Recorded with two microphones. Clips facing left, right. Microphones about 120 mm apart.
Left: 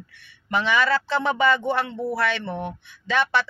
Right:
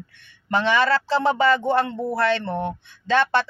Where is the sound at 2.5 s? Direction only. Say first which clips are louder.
Right 4 dB; 25° right (ahead or behind).